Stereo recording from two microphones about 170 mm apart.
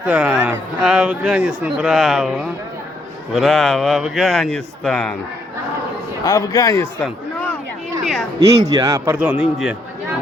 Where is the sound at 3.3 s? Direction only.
Centre (ahead or behind).